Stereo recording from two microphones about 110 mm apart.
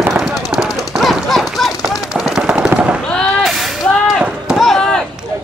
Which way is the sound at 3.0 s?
5° left (ahead or behind).